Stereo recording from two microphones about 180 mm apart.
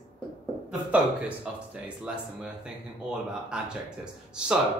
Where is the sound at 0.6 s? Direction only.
5° right (ahead or behind).